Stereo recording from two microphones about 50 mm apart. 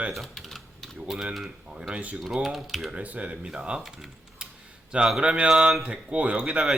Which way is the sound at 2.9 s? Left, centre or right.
Right.